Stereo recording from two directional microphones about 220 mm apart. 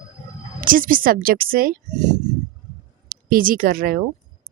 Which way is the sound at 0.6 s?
40° right (ahead or behind).